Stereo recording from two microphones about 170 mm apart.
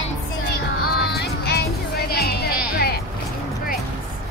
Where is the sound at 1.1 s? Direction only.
65° left (ahead or behind).